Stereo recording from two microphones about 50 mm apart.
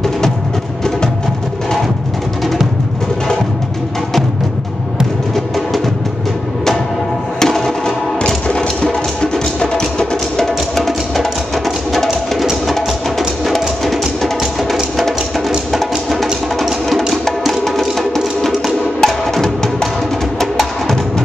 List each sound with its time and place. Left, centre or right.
7.3 s music: centre
10.4 s music: centre